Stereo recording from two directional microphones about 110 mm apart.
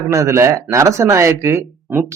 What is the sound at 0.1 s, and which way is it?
Speech, 25° right (ahead or behind).